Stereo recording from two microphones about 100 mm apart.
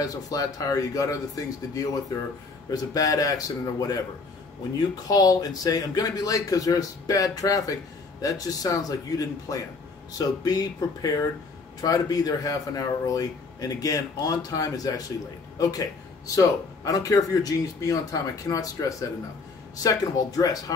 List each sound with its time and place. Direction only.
0.0 s a man's voice: 40° left (ahead or behind)